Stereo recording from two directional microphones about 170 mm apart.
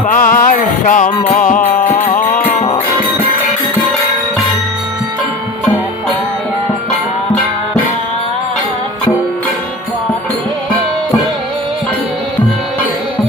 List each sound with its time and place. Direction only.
0.1 s music: 55° left (ahead or behind)